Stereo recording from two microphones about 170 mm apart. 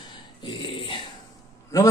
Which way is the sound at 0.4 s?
30° left (ahead or behind).